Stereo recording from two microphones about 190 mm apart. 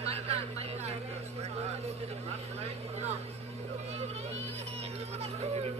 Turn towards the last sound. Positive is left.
turn(degrees=-35)  # may be behind; listen again after turning